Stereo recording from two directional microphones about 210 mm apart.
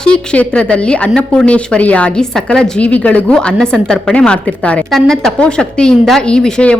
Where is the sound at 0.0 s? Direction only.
5° left (ahead or behind).